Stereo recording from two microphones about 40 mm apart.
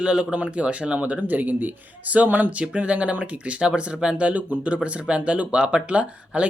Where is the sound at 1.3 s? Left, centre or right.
Right.